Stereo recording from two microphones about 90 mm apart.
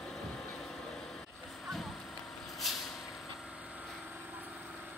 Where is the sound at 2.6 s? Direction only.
Centre (ahead or behind).